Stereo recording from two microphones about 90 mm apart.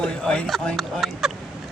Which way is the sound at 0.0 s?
10° left (ahead or behind).